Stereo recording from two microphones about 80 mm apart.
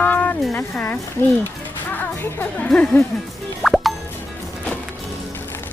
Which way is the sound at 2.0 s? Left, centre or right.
Left.